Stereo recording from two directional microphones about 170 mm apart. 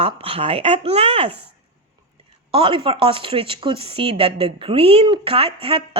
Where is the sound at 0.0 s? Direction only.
35° right (ahead or behind).